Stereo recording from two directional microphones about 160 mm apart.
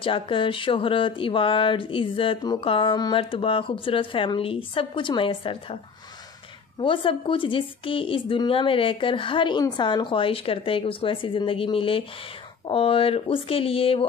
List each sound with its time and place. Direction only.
0.0 s speech: 30° left (ahead or behind)
6.8 s speech: 35° left (ahead or behind)